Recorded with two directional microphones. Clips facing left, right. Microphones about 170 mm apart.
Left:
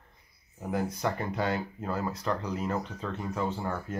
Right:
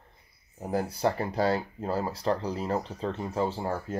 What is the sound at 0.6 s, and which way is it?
Speech, 35° right (ahead or behind).